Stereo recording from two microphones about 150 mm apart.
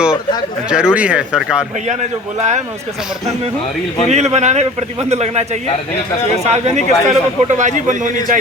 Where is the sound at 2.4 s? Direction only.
50° right (ahead or behind).